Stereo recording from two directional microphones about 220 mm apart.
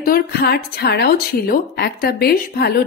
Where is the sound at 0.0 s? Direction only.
45° left (ahead or behind).